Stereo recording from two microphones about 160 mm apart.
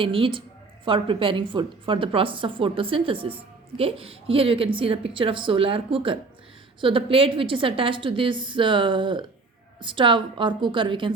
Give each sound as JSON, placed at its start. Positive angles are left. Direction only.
{"t": 0.0, "sound": "a woman's voice", "side_deg": -35}